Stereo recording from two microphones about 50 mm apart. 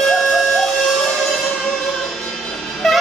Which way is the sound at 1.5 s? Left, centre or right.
Left.